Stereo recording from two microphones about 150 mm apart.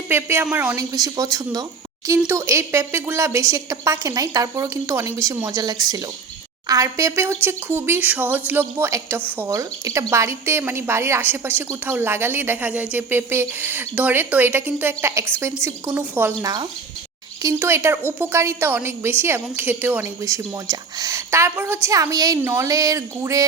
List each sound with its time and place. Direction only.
0.1 s a woman's voice: 15° right (ahead or behind)
0.9 s a woman's voice: 25° right (ahead or behind)
16.4 s a woman's voice: 25° right (ahead or behind)